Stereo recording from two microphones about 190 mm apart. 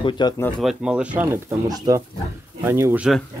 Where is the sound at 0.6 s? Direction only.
5° right (ahead or behind).